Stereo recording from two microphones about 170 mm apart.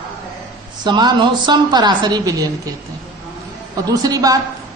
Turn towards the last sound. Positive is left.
turn(degrees=-20)  # may be behind; listen again after turning